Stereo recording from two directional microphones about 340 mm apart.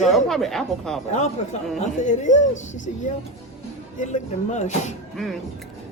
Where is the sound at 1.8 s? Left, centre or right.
Left.